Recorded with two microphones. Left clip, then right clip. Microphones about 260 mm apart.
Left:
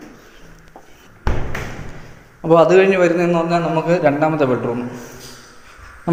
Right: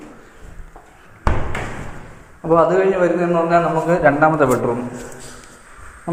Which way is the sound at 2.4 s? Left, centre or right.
Left.